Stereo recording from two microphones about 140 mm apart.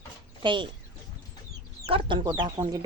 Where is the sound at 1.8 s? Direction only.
40° right (ahead or behind).